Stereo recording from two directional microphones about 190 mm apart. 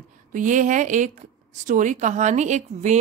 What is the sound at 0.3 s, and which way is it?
A woman's voice, 40° right (ahead or behind).